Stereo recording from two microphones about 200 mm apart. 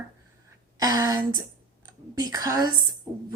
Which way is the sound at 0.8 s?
20° right (ahead or behind).